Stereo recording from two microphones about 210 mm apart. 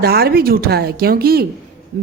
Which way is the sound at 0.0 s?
45° right (ahead or behind).